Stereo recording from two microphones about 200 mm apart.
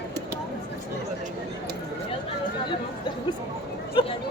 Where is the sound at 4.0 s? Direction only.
25° left (ahead or behind).